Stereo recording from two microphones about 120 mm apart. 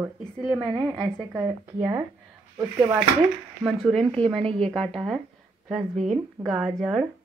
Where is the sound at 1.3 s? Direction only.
15° right (ahead or behind).